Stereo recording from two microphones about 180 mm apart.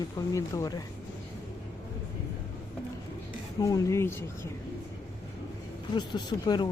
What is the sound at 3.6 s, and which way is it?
Speech, 15° left (ahead or behind).